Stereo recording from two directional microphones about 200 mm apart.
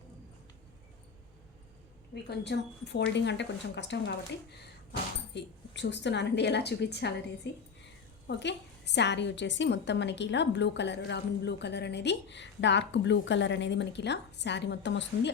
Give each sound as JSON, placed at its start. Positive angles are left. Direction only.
{"t": 2.4, "sound": "a woman's voice", "side_deg": 60}